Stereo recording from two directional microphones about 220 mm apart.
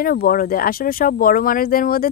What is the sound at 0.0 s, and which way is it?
Speech, 40° left (ahead or behind).